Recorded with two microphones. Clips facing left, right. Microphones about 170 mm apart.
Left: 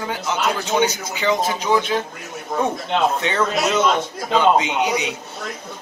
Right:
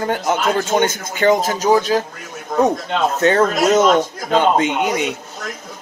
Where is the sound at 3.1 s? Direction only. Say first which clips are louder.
Right 6 dB; 45° right (ahead or behind).